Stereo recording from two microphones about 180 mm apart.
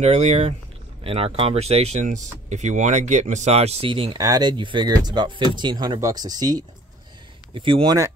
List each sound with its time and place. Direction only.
0.0 s speech: 40° right (ahead or behind); by 8.1 s 20° right (ahead or behind)